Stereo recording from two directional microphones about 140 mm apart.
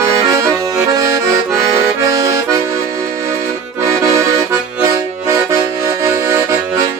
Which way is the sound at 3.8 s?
20° right (ahead or behind).